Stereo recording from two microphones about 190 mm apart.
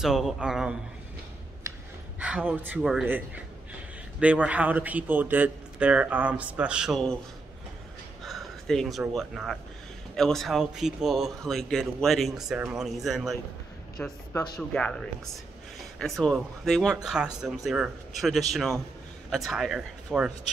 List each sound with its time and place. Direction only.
0.0 s a man's voice: centre (ahead or behind)
2.1 s a man's voice: 5° right (ahead or behind)
8.2 s a man's voice: centre (ahead or behind)
14.3 s speech: 20° left (ahead or behind)
14.7 s a man's voice: 5° left (ahead or behind)